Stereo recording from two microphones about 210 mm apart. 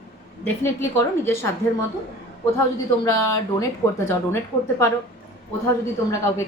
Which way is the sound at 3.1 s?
15° left (ahead or behind).